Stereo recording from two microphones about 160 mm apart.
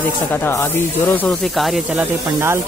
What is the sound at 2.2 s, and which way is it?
Speech, 15° right (ahead or behind).